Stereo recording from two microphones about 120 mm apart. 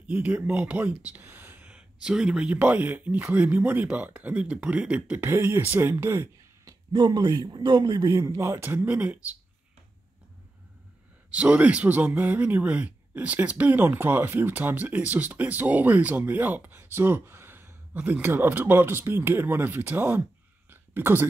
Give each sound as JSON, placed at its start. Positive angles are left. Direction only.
{"t": 0.1, "sound": "speech", "side_deg": -15}
{"t": 6.9, "sound": "a man's voice", "side_deg": -35}
{"t": 11.2, "sound": "speech", "side_deg": -10}
{"t": 20.7, "sound": "a sound", "side_deg": -20}